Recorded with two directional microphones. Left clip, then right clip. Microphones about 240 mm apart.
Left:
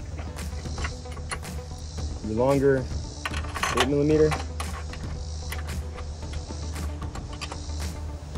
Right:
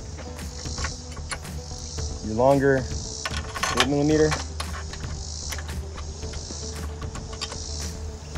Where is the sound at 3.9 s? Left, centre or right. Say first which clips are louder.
Left 1 dB; right.